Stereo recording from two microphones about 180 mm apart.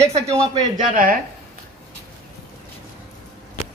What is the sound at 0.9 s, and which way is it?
Speech, 50° right (ahead or behind).